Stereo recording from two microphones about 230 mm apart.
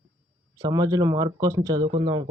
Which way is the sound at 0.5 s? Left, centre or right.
Centre.